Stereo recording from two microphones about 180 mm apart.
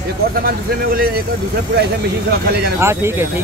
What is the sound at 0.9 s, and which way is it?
Speech, 55° right (ahead or behind).